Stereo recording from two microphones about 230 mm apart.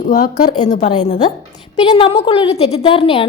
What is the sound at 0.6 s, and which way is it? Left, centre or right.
A woman's voice, left.